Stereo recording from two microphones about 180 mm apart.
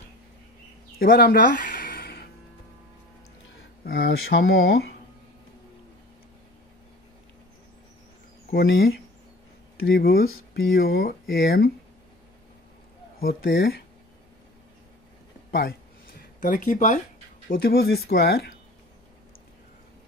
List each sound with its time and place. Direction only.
0.9 s a sound: 55° left (ahead or behind)
3.8 s speech: 55° left (ahead or behind)
8.5 s speech: 75° left (ahead or behind)
9.8 s speech: 60° left (ahead or behind)
13.4 s speech: 60° left (ahead or behind)
15.5 s a sound: 55° left (ahead or behind)
17.5 s speech: 55° left (ahead or behind)